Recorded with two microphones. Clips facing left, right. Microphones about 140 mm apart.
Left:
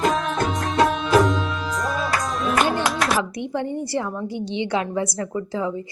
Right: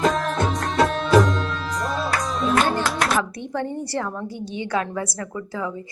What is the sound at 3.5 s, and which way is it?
A woman's voice, 15° left (ahead or behind).